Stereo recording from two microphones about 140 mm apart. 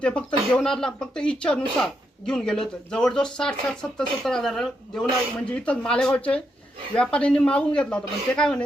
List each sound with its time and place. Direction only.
0.0 s speech: 5° left (ahead or behind)